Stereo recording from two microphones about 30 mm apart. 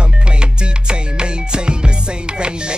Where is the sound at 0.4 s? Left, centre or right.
Right.